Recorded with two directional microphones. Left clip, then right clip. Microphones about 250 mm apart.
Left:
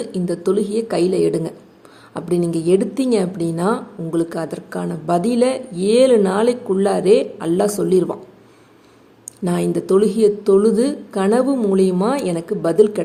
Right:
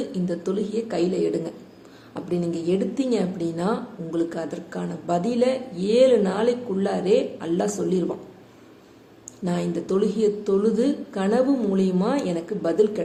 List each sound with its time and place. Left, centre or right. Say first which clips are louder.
0.1 s a woman's voice: left 8 dB; left
9.2 s a woman's voice: left 7 dB; left